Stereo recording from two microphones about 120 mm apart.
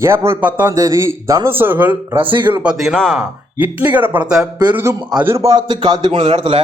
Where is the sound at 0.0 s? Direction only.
20° right (ahead or behind).